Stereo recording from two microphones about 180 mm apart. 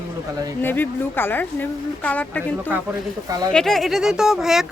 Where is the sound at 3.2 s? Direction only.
20° right (ahead or behind).